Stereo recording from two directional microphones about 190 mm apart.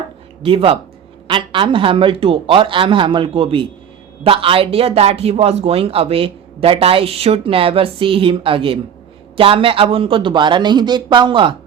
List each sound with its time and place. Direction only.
0.4 s speech: 30° right (ahead or behind)